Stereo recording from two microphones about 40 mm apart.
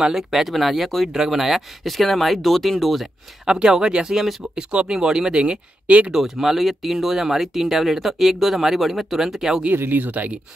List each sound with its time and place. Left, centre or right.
0.1 s speech: centre
3.4 s speech: centre
5.4 s speech: right
6.1 s speech: centre
9.8 s speech: right